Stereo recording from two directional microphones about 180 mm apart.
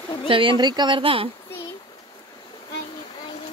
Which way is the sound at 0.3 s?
30° right (ahead or behind).